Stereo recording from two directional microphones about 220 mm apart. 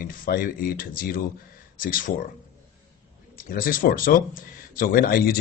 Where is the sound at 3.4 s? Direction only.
40° left (ahead or behind).